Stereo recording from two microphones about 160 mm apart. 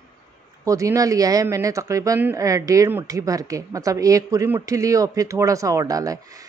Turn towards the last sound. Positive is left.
turn(degrees=-20)  # may be behind; listen again after turning